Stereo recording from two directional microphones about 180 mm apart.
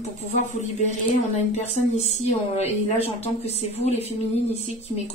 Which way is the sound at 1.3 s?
40° left (ahead or behind).